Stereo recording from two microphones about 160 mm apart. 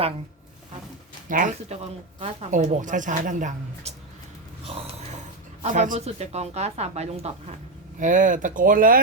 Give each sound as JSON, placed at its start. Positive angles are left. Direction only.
{"t": 1.3, "sound": "speech", "side_deg": -55}
{"t": 4.6, "sound": "gasp", "side_deg": -40}
{"t": 5.6, "sound": "speech", "side_deg": -50}
{"t": 7.9, "sound": "speech", "side_deg": -55}